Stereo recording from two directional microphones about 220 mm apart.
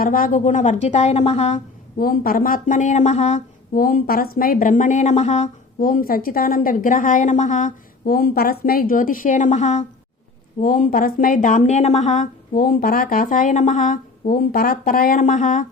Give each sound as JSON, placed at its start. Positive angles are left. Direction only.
{"t": 0.0, "sound": "speech", "side_deg": 40}